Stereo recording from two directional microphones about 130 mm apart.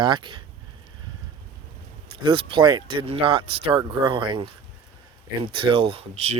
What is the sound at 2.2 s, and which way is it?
Speech, 40° right (ahead or behind).